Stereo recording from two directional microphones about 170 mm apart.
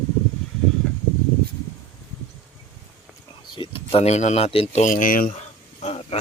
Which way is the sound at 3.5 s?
30° left (ahead or behind).